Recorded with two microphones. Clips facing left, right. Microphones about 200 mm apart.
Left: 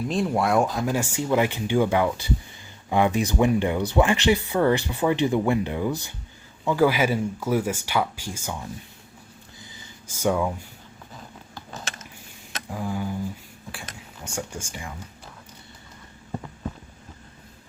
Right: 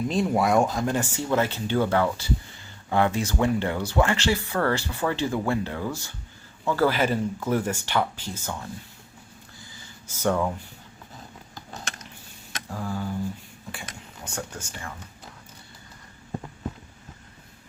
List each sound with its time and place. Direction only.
0.0 s speech: centre (ahead or behind)
10.1 s speech: 10° left (ahead or behind)
12.7 s speech: 15° left (ahead or behind)
14.3 s speech: 10° left (ahead or behind)